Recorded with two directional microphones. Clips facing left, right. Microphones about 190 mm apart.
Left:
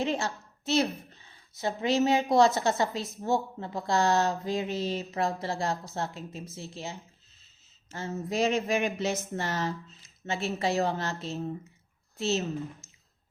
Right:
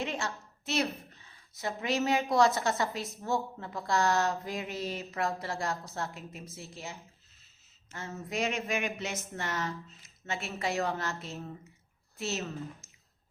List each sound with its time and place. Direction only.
0.0 s a woman's voice: 30° left (ahead or behind)